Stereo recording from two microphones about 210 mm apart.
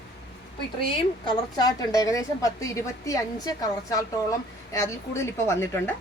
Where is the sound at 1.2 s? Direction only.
15° left (ahead or behind).